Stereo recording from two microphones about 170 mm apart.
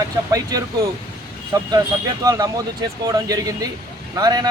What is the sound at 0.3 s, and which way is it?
Speech, 20° right (ahead or behind).